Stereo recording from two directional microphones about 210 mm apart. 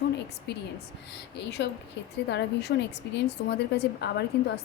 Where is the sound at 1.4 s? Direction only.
55° left (ahead or behind).